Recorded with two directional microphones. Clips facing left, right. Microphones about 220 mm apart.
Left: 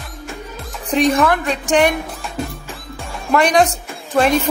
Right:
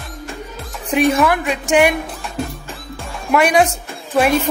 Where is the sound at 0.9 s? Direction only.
5° right (ahead or behind).